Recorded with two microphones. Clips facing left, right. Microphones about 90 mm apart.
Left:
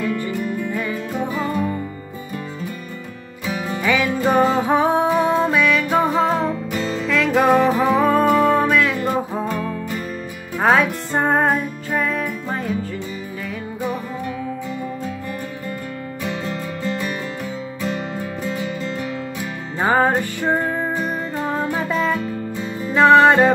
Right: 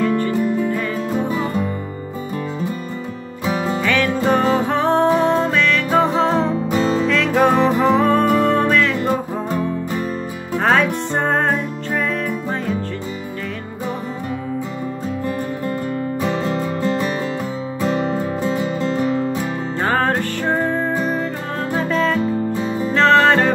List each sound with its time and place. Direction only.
0.3 s music: 25° right (ahead or behind)
3.4 s music: 30° right (ahead or behind)
3.8 s music: 10° left (ahead or behind)
6.4 s music: 30° right (ahead or behind)
7.1 s music: centre (ahead or behind)
10.6 s music: 5° left (ahead or behind)
16.2 s music: 35° right (ahead or behind)
19.8 s music: 10° left (ahead or behind)
22.6 s music: 30° right (ahead or behind)
22.9 s music: 15° left (ahead or behind)